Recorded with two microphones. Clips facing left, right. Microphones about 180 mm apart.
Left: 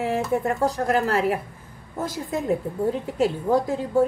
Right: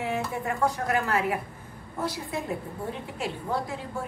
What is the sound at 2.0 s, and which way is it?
A woman's voice, 45° left (ahead or behind).